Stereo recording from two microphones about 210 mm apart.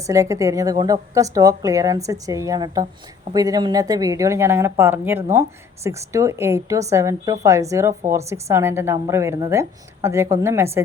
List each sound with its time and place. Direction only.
0.0 s a woman's voice: 15° right (ahead or behind)